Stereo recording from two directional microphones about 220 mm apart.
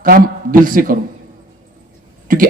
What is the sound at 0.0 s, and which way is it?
Speech, 40° right (ahead or behind).